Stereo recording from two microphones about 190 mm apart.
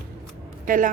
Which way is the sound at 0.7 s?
45° right (ahead or behind).